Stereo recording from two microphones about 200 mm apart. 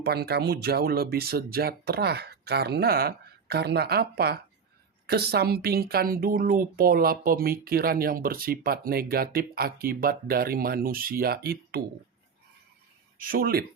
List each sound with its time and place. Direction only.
0.0 s speech: 55° right (ahead or behind)
13.1 s speech: 45° right (ahead or behind)